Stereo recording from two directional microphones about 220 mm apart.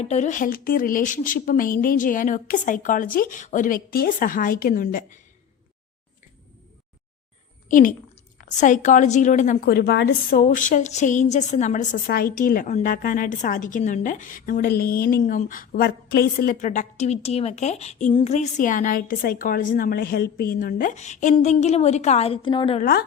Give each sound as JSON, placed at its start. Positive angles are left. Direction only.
{"t": 0.0, "sound": "a woman's voice", "side_deg": 30}
{"t": 7.7, "sound": "a woman's voice", "side_deg": 35}
{"t": 22.8, "sound": "a woman's voice", "side_deg": 45}